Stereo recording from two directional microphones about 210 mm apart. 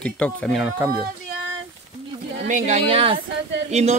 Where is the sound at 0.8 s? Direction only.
20° right (ahead or behind).